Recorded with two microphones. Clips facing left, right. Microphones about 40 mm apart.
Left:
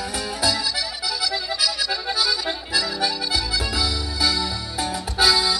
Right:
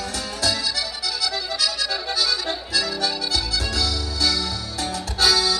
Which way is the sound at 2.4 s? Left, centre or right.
Centre.